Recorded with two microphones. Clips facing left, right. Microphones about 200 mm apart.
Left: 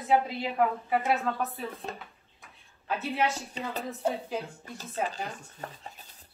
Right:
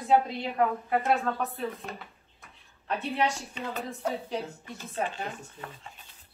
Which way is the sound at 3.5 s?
35° left (ahead or behind).